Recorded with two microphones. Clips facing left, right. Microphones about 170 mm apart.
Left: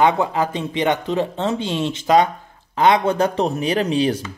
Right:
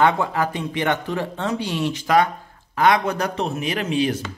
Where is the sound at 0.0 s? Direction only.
20° left (ahead or behind).